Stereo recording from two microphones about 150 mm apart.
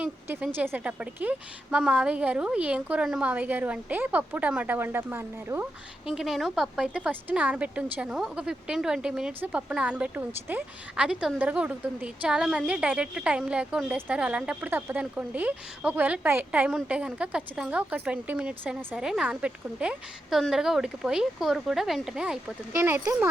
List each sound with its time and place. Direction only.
0.0 s a woman's voice: 10° right (ahead or behind)
6.1 s a woman's voice: centre (ahead or behind)
22.7 s a woman's voice: 20° right (ahead or behind)